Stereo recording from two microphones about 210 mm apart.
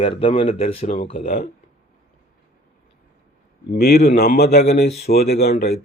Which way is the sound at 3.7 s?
50° left (ahead or behind).